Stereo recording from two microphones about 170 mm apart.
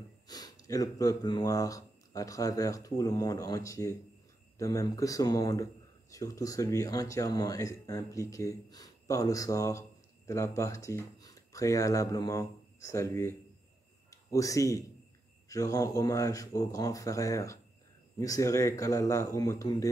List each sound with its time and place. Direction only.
0.3 s speech: 20° left (ahead or behind)